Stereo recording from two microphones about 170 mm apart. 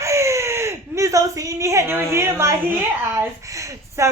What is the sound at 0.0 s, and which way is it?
Speech, 15° right (ahead or behind).